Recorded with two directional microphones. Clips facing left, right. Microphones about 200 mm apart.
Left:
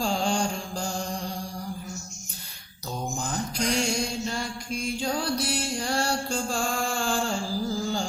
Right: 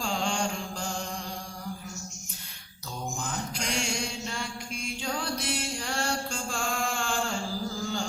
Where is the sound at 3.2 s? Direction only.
35° left (ahead or behind).